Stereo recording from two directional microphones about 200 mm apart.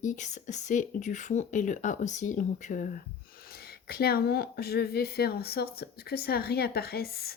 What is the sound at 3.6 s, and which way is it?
Speech, 50° left (ahead or behind).